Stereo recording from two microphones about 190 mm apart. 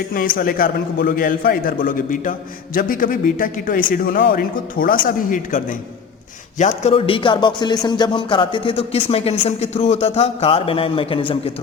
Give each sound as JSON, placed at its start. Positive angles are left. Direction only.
{"t": 0.3, "sound": "a man's voice", "side_deg": 50}